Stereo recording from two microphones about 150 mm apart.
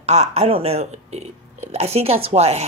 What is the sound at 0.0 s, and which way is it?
Speech, 45° right (ahead or behind).